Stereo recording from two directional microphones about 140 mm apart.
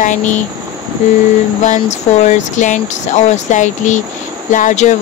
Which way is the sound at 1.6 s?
60° left (ahead or behind).